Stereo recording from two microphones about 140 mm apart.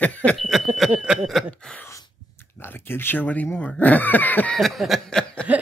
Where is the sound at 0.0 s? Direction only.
10° left (ahead or behind).